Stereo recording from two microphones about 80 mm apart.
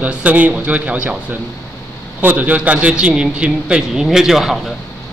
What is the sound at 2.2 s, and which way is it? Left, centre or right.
A man's voice, right.